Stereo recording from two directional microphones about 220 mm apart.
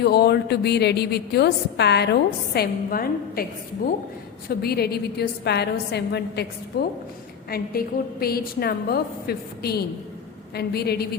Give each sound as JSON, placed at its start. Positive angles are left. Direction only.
{"t": 0.0, "sound": "a woman's voice", "side_deg": 45}
{"t": 4.4, "sound": "a woman's voice", "side_deg": 45}